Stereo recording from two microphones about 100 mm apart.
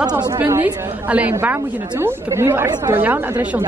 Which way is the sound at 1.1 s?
15° right (ahead or behind).